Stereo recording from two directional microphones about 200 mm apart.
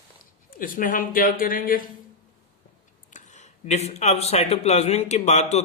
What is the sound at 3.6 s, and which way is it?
Speech, 35° left (ahead or behind).